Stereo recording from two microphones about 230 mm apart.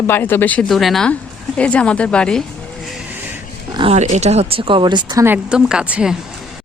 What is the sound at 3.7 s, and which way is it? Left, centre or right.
Speech, right.